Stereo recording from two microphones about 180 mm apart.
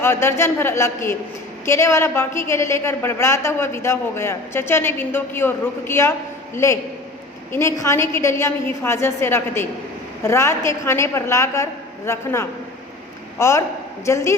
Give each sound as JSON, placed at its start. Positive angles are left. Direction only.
{"t": 0.0, "sound": "a woman's voice", "side_deg": 15}